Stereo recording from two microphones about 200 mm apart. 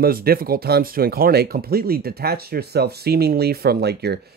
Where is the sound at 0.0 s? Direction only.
50° right (ahead or behind).